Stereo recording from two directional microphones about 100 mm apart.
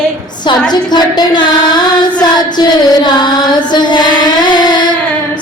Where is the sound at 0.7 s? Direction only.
45° left (ahead or behind).